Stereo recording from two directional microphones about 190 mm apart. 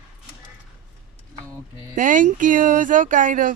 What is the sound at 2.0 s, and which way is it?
Speech, 45° right (ahead or behind).